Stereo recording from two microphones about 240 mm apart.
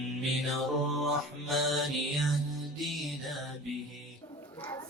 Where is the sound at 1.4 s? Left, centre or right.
Centre.